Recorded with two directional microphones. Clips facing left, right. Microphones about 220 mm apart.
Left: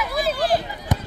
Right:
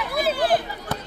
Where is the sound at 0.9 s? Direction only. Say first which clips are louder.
Left 5 dB; 15° left (ahead or behind).